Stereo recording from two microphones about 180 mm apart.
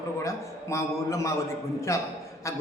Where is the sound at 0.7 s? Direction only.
15° left (ahead or behind).